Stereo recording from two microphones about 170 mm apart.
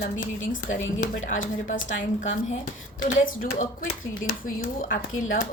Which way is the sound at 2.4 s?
50° left (ahead or behind).